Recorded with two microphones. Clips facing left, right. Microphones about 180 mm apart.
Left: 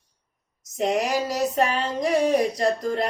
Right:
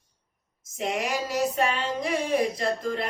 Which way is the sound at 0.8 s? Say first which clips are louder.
Left 5 dB; 40° left (ahead or behind).